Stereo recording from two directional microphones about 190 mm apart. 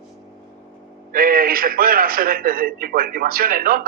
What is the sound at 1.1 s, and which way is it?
A man's voice, 50° right (ahead or behind).